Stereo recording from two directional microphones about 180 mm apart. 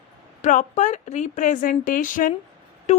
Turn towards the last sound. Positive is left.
turn(degrees=40)  # may be behind; listen again after turning